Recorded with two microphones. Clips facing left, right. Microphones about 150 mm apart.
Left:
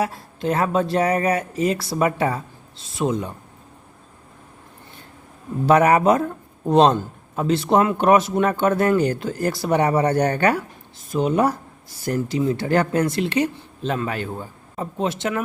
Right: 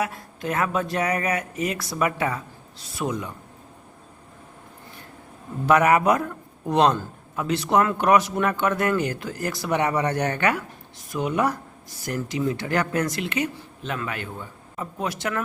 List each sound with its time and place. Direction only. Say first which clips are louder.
0.0 s a woman's voice: left 4 dB; 30° left (ahead or behind)
5.6 s a man's voice: left 3 dB; 30° left (ahead or behind)